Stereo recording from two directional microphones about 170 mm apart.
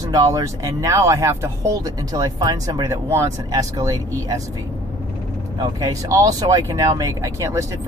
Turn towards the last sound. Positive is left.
turn(degrees=-20)  # may be behind; listen again after turning